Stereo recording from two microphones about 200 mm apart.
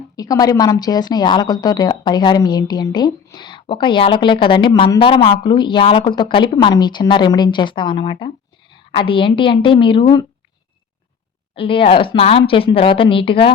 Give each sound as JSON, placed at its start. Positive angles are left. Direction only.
{"t": 0.2, "sound": "a woman's voice", "side_deg": 20}
{"t": 11.5, "sound": "a woman's voice", "side_deg": 25}